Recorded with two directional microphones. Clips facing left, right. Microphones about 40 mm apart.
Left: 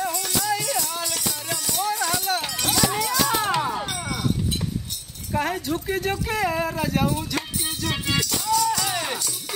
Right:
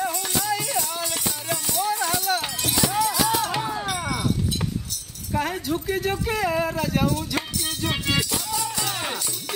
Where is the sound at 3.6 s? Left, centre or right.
Centre.